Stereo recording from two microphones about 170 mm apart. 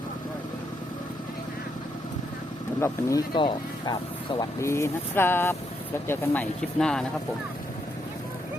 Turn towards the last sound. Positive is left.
turn(degrees=5)  # may be behind; listen again after turning